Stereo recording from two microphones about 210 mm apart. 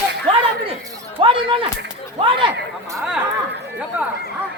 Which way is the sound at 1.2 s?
25° right (ahead or behind).